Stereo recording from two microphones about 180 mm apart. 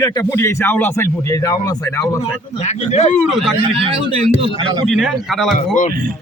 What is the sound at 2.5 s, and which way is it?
Speech, 35° left (ahead or behind).